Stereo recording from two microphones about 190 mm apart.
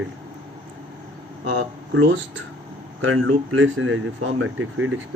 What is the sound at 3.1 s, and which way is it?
Speech, 90° right.